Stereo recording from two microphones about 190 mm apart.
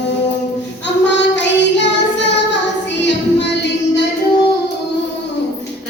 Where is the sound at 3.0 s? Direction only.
65° left (ahead or behind).